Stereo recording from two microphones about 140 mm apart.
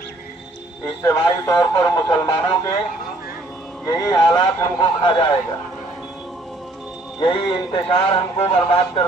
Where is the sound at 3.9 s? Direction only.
30° left (ahead or behind).